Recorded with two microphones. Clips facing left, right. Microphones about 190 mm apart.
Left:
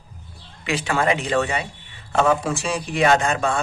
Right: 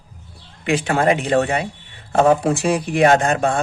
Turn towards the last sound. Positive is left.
turn(degrees=-55)  # may be behind; listen again after turning